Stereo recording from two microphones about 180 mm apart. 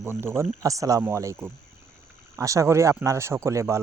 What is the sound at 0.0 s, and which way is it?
Speech, 15° right (ahead or behind).